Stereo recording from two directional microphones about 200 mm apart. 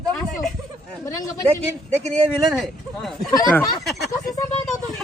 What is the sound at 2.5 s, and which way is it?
Speech, centre (ahead or behind).